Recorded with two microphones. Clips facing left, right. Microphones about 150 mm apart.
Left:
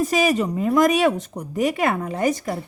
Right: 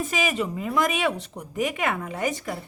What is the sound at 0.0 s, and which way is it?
Speech, 40° left (ahead or behind).